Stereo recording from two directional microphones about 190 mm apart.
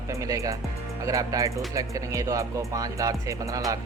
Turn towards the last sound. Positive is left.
turn(degrees=-15)  # may be behind; listen again after turning